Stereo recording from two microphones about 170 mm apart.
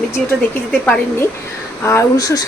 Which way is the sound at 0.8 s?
10° left (ahead or behind).